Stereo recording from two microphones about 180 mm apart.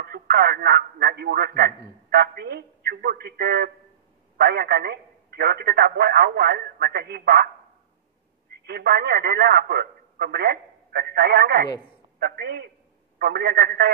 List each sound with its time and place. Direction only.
0.0 s a man's voice: 55° right (ahead or behind)
8.5 s a man's voice: 65° right (ahead or behind)